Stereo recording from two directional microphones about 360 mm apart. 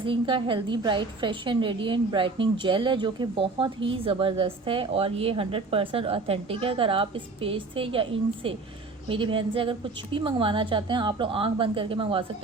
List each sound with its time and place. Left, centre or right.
0.0 s a woman's voice: centre